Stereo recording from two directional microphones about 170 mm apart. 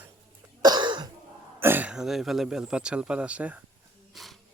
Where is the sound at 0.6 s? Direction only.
25° right (ahead or behind).